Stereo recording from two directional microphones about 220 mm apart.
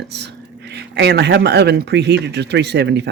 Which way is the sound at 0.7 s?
50° right (ahead or behind).